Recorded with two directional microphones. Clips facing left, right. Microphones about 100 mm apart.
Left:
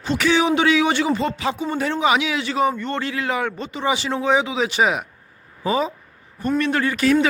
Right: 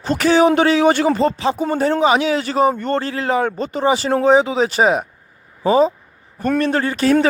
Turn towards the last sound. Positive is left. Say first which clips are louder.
# right 2 dB
turn(degrees=-35)  # may be behind; listen again after turning